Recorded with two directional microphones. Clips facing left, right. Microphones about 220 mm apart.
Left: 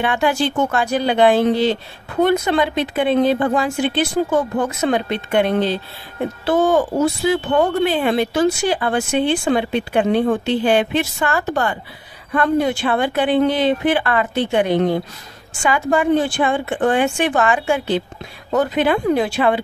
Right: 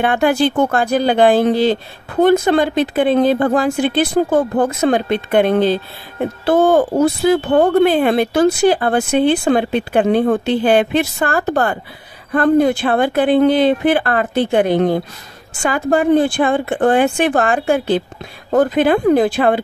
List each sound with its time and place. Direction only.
0.0 s speech: 55° right (ahead or behind)
12.3 s speech: 40° right (ahead or behind)
14.5 s speech: 40° right (ahead or behind)
16.0 s speech: 55° right (ahead or behind)
16.5 s speech: 40° right (ahead or behind)
17.3 s speech: 55° right (ahead or behind)